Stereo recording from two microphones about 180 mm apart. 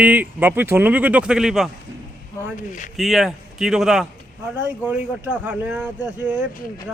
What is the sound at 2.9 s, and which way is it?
Speech, centre (ahead or behind).